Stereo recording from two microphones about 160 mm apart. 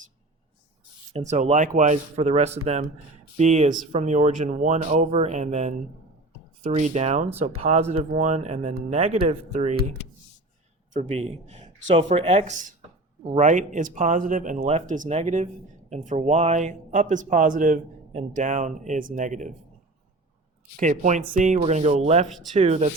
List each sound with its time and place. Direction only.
1.1 s speech: 50° right (ahead or behind)
10.9 s speech: 40° right (ahead or behind)
14.6 s speech: 40° right (ahead or behind)
20.7 s speech: 50° right (ahead or behind)